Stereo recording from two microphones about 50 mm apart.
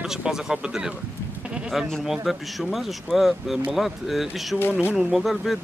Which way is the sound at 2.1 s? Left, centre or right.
Centre.